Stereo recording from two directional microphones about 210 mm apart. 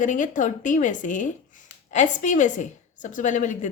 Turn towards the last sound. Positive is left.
turn(degrees=35)  # may be behind; listen again after turning